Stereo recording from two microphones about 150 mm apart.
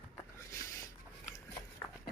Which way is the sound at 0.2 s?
20° left (ahead or behind).